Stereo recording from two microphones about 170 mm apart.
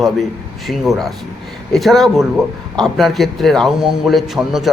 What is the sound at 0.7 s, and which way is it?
A man's voice, centre (ahead or behind).